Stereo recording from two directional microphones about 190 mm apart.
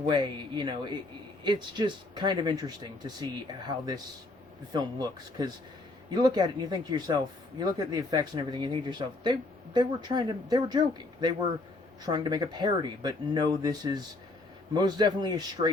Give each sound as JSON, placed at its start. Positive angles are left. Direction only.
{"t": 0.1, "sound": "speech", "side_deg": -25}